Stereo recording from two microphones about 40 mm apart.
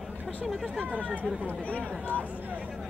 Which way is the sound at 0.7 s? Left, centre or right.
Right.